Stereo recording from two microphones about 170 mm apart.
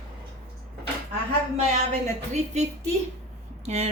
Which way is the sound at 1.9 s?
40° right (ahead or behind).